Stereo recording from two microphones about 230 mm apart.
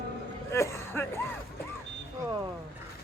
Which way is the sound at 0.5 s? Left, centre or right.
Centre.